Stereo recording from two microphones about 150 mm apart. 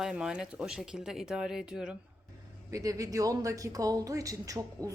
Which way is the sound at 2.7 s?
20° right (ahead or behind).